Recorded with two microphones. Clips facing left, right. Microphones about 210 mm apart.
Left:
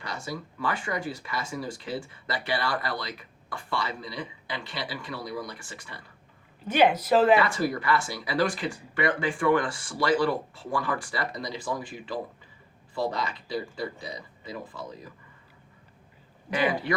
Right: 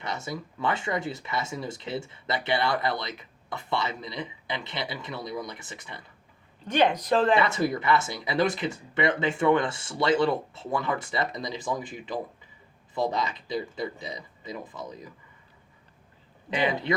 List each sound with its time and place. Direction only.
0.0 s speech: 20° right (ahead or behind)
6.7 s speech: 5° left (ahead or behind)
7.3 s speech: 20° right (ahead or behind)
16.5 s speech: 25° right (ahead or behind)